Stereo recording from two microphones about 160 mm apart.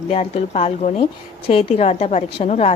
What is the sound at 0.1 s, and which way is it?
A woman's voice, 40° left (ahead or behind).